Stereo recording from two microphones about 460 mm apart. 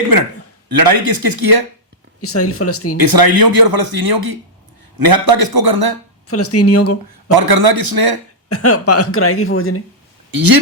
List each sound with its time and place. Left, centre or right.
0.1 s speech: right
2.2 s speech: left
3.0 s speech: right
6.2 s speech: left
7.3 s speech: right
8.4 s speech: left
10.3 s speech: right